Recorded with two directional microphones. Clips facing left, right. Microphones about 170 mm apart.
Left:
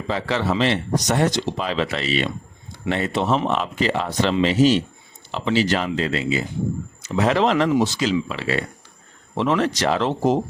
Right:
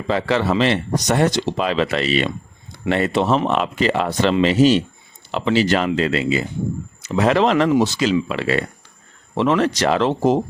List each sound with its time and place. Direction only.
0.1 s speech: 65° right (ahead or behind)
9.3 s speech: 75° right (ahead or behind)